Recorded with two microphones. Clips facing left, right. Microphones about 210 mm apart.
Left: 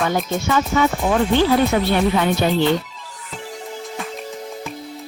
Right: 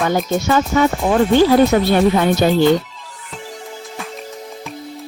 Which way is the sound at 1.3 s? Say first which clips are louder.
Right 6 dB; 40° right (ahead or behind).